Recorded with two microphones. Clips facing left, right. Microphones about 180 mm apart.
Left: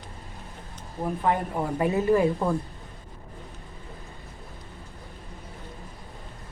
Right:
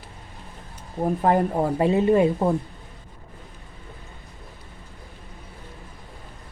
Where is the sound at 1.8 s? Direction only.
25° right (ahead or behind).